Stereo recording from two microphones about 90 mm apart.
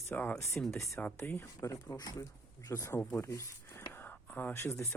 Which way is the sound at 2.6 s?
35° left (ahead or behind).